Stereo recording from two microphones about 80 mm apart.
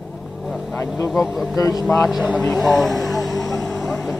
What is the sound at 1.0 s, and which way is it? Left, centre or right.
Speech, centre.